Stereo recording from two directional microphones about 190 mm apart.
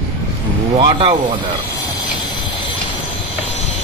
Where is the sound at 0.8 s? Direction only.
30° right (ahead or behind).